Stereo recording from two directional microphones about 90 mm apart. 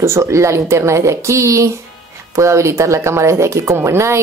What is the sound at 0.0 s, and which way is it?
A woman's voice, 30° right (ahead or behind).